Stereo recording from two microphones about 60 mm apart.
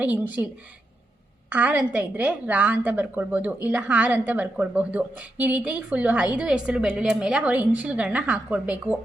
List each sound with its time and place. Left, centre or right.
0.0 s a woman's voice: right
1.5 s a woman's voice: right